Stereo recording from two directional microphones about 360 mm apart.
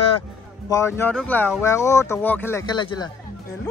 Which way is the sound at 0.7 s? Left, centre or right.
Centre.